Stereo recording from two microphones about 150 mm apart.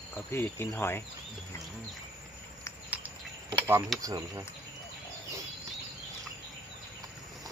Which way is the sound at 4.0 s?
25° right (ahead or behind).